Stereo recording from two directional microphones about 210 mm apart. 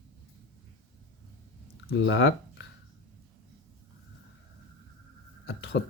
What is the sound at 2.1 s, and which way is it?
Speech, 55° left (ahead or behind).